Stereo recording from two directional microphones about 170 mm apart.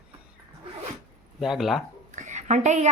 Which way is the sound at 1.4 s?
Centre (ahead or behind).